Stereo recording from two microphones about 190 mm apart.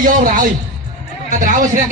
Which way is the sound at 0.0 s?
45° right (ahead or behind).